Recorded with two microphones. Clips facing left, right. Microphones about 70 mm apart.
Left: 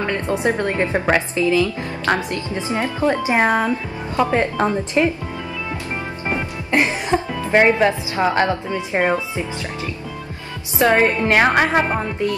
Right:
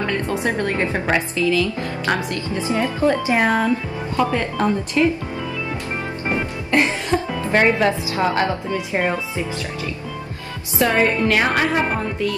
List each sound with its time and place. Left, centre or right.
0.0 s a woman's voice: left
6.7 s music: left
7.5 s a woman's voice: centre
10.8 s a woman's voice: left